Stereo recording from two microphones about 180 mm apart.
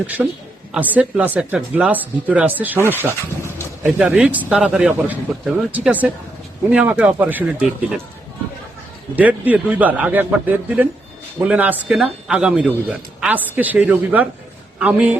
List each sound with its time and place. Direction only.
0.2 s a woman's voice: 5° right (ahead or behind)
9.1 s a man's voice: 10° right (ahead or behind)